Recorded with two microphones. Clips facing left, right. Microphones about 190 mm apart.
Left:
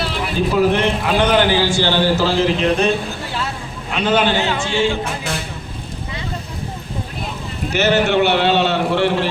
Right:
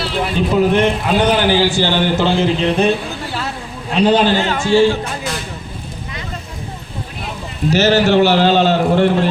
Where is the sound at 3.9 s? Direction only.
35° right (ahead or behind).